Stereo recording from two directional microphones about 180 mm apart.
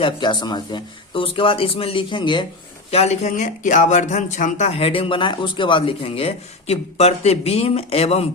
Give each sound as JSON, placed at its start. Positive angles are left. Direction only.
{"t": 0.0, "sound": "speech", "side_deg": 25}
{"t": 2.9, "sound": "speech", "side_deg": 35}